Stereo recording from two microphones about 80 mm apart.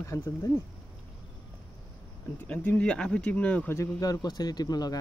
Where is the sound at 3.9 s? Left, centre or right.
Left.